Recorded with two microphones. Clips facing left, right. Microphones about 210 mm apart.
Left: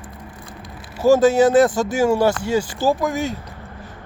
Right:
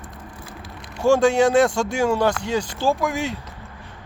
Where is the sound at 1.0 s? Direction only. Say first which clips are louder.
Left 3 dB; 5° left (ahead or behind).